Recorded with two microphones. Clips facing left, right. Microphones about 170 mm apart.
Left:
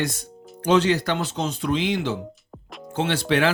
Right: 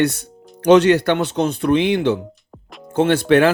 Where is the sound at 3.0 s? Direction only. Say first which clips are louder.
Right 8 dB; 50° right (ahead or behind).